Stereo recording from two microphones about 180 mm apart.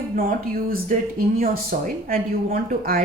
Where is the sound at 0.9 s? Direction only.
45° right (ahead or behind).